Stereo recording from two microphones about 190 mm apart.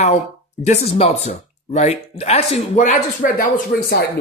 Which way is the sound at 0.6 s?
35° left (ahead or behind).